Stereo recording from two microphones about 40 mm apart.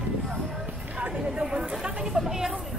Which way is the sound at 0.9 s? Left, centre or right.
Right.